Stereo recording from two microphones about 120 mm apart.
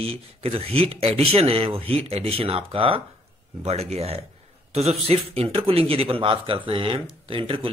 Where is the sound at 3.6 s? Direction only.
60° right (ahead or behind).